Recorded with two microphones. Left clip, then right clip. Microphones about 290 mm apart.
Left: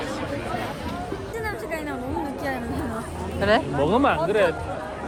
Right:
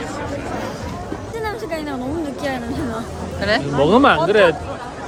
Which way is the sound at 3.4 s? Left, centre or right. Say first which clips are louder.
Right 1 dB; centre.